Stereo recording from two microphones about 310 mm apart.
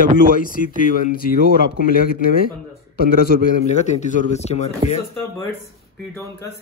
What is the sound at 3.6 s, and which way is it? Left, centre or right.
Speech, left.